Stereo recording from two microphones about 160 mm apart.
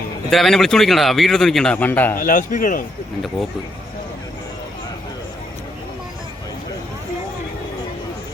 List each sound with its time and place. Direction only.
0.3 s a man's voice: centre (ahead or behind)
2.1 s speech: 60° left (ahead or behind)